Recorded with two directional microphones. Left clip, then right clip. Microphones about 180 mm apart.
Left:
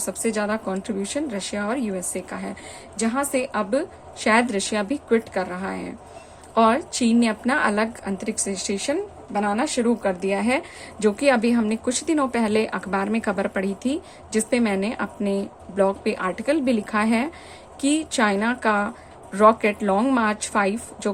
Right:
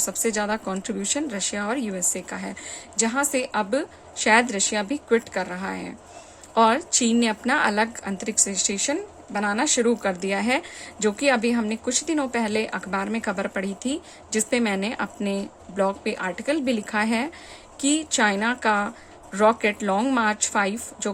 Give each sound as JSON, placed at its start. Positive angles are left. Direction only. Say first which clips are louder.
{"t": 0.0, "sound": "a woman's voice", "louder": "even", "side_deg": -15}